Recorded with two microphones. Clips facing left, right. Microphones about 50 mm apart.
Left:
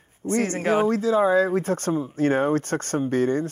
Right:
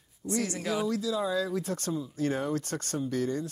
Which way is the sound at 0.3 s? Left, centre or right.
Left.